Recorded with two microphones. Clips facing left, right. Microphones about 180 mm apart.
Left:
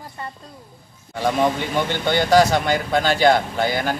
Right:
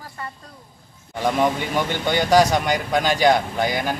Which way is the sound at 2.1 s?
15° right (ahead or behind).